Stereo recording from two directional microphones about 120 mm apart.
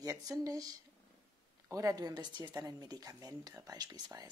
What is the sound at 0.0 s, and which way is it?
A woman's voice, 30° right (ahead or behind).